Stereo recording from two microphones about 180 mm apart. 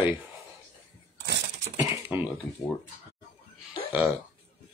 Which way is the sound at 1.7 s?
10° right (ahead or behind).